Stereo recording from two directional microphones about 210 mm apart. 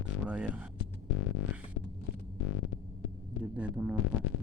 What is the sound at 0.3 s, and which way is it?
Speech, 5° right (ahead or behind).